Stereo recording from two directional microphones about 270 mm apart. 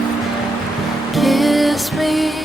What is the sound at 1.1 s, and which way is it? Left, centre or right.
Music, centre.